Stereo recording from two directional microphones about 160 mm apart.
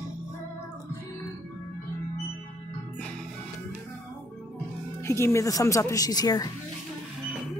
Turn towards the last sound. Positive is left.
turn(degrees=25)  # may be behind; listen again after turning